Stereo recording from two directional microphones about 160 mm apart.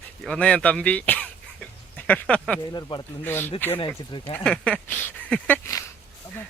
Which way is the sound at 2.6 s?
25° left (ahead or behind).